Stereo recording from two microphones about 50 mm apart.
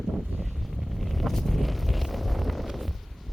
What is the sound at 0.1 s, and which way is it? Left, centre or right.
Vehicle, centre.